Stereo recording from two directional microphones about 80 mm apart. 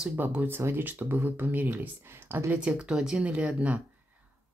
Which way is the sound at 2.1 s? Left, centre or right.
Right.